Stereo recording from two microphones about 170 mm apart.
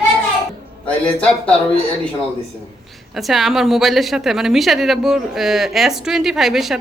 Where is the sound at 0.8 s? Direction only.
10° left (ahead or behind).